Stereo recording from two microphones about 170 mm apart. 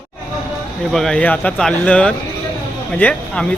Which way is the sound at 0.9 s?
5° left (ahead or behind).